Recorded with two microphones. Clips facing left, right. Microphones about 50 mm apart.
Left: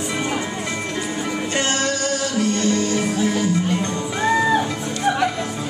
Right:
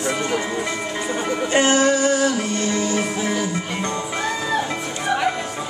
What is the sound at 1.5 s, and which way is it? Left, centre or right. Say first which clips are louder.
Music: right 7 dB; centre.